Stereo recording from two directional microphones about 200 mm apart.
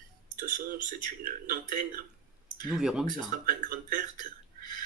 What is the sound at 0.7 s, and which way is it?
Speech, 45° right (ahead or behind).